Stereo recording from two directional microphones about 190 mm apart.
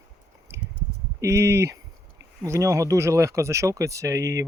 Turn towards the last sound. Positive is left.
turn(degrees=-15)  # may be behind; listen again after turning